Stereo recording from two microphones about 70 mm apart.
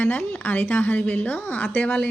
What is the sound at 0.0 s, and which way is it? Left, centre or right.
Speech, left.